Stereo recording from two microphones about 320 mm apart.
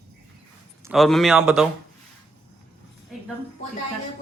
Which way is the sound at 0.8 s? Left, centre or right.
Centre.